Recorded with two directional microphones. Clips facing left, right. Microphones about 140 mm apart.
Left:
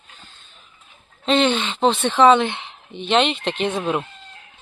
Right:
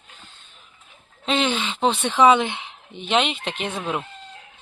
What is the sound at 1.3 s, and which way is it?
A woman's voice, 5° right (ahead or behind).